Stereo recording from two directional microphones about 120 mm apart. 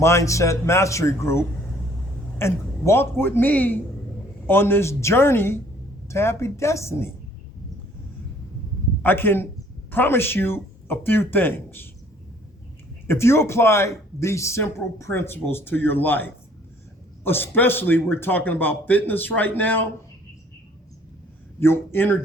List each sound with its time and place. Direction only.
0.0 s a man's voice: 25° left (ahead or behind)
9.0 s a man's voice: 15° left (ahead or behind)
13.1 s a man's voice: 20° left (ahead or behind)
21.6 s a man's voice: 20° left (ahead or behind)